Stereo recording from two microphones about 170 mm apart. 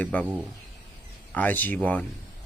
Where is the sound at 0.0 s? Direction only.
5° left (ahead or behind).